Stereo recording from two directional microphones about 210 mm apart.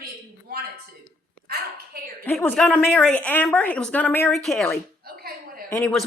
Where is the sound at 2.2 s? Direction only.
10° left (ahead or behind).